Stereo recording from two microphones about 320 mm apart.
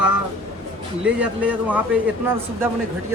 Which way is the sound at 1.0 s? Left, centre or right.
Centre.